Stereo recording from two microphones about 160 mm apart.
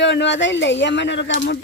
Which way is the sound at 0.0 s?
90° left.